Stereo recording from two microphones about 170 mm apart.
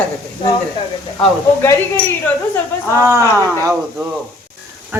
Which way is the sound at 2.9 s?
15° right (ahead or behind).